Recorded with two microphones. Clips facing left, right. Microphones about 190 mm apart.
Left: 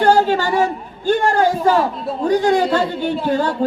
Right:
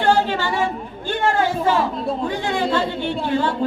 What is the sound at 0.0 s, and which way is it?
A man's voice, 40° left (ahead or behind).